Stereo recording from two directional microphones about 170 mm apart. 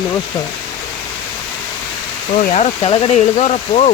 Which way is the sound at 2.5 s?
40° left (ahead or behind).